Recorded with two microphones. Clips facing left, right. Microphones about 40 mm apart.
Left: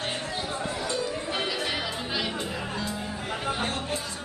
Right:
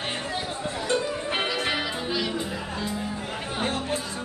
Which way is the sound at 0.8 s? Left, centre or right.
Right.